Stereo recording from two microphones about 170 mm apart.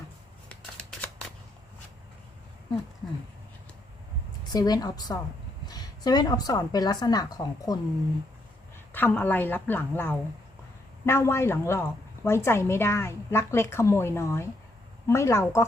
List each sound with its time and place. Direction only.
4.5 s a woman's voice: 25° left (ahead or behind)
8.9 s a woman's voice: 10° left (ahead or behind)